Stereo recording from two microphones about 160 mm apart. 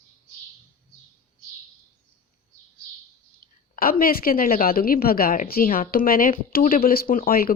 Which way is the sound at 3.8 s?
65° left (ahead or behind).